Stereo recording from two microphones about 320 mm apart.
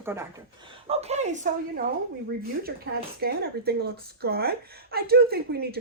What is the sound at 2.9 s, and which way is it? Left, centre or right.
Speech, right.